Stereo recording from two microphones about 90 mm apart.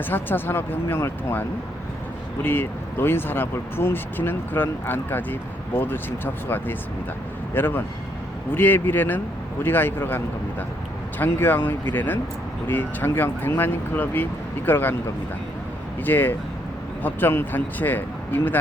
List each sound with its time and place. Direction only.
0.0 s speech: 25° left (ahead or behind)
11.2 s speech: 25° left (ahead or behind)
16.0 s speech: 20° left (ahead or behind)